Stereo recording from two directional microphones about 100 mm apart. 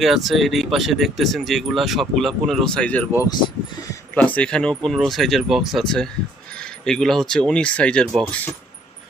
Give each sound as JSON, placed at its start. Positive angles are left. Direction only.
{"t": 0.0, "sound": "speech", "side_deg": 0}
{"t": 3.2, "sound": "speech", "side_deg": 45}
{"t": 4.1, "sound": "speech", "side_deg": 15}